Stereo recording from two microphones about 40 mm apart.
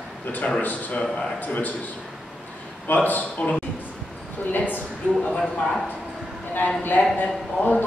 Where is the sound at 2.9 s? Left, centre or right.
Left.